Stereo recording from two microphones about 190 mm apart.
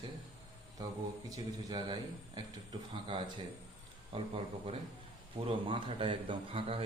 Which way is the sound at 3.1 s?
25° right (ahead or behind).